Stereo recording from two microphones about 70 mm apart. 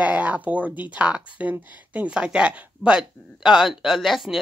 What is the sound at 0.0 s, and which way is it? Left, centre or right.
Speech, right.